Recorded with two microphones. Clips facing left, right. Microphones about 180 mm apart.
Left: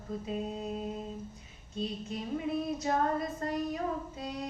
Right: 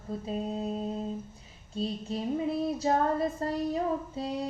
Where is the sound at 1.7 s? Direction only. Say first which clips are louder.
Right 4 dB; 30° right (ahead or behind).